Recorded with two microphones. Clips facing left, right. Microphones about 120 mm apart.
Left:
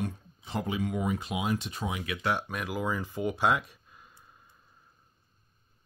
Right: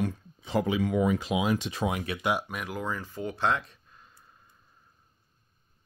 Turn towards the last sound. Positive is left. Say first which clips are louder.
# left 1 dB
turn(degrees=10)  # may be behind; listen again after turning